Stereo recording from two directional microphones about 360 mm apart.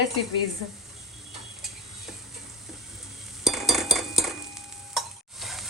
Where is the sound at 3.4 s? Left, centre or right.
Centre.